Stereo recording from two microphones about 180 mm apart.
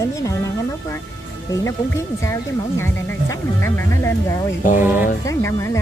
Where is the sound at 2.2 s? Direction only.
15° left (ahead or behind).